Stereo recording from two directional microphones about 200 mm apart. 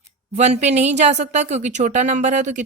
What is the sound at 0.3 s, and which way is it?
Speech, 35° right (ahead or behind).